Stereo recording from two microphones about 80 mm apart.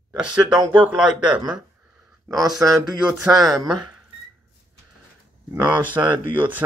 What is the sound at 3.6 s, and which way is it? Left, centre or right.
Speech, right.